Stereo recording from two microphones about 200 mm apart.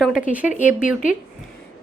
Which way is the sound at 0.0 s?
5° right (ahead or behind).